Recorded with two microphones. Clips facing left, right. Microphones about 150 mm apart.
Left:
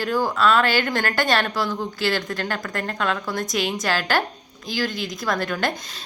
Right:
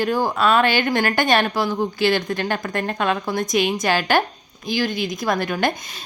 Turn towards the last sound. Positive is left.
turn(degrees=-15)  # may be behind; listen again after turning